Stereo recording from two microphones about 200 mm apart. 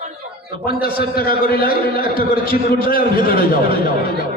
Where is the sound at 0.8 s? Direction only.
45° left (ahead or behind).